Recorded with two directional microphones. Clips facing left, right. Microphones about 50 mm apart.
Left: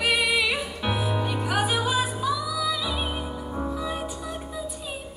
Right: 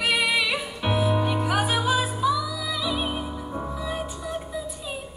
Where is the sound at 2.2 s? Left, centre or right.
Centre.